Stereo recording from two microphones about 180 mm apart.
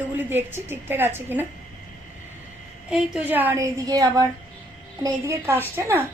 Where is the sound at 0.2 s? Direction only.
10° right (ahead or behind).